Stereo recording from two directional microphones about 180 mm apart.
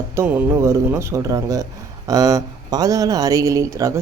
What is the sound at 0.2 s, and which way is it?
Speech, 15° right (ahead or behind).